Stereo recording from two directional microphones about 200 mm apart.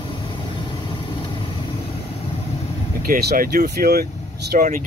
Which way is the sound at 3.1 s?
50° right (ahead or behind).